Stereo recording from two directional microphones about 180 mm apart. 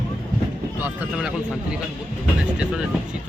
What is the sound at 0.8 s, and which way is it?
Speech, 5° right (ahead or behind).